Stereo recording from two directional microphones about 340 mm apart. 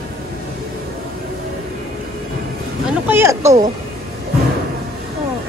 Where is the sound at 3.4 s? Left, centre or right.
Centre.